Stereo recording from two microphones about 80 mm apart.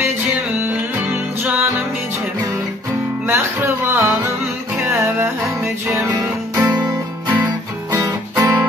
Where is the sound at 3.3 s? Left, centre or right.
Right.